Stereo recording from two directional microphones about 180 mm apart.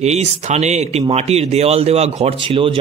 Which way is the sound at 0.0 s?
35° right (ahead or behind).